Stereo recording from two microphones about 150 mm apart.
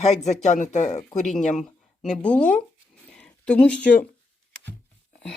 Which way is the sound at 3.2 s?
10° left (ahead or behind).